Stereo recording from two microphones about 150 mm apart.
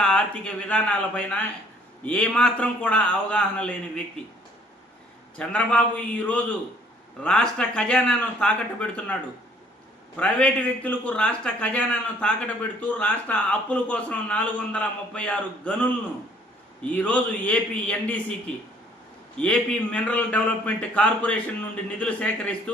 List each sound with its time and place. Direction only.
0.0 s a man's voice: 5° left (ahead or behind)
5.4 s a man's voice: 10° left (ahead or behind)
7.2 s a man's voice: 5° left (ahead or behind)
10.2 s a man's voice: 10° left (ahead or behind)
19.4 s a man's voice: 10° left (ahead or behind)